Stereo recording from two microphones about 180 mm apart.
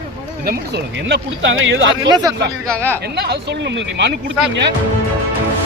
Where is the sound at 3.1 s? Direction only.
70° right (ahead or behind).